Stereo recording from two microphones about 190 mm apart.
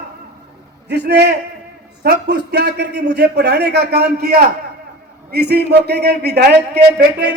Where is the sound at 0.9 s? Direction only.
60° right (ahead or behind).